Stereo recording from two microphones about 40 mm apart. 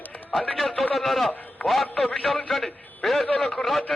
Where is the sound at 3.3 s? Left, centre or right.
Centre.